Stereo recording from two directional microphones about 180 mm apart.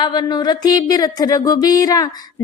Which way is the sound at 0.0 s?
25° left (ahead or behind).